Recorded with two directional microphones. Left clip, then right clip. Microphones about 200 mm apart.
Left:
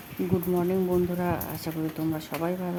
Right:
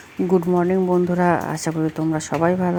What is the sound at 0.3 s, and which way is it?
Speech, 25° right (ahead or behind).